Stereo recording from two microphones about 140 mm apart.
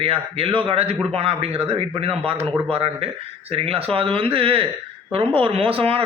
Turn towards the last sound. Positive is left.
turn(degrees=-40)  # may be behind; listen again after turning